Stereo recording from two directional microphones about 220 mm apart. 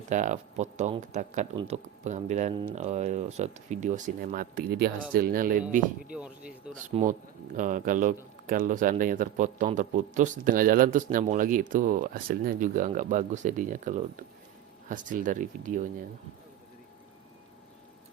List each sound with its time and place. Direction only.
0.1 s speech: 35° right (ahead or behind)
6.1 s speech: 5° right (ahead or behind)
6.8 s speech: 35° right (ahead or behind)